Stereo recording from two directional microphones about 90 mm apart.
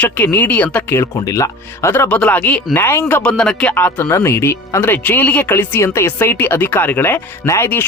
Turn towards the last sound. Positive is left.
turn(degrees=25)  # may be behind; listen again after turning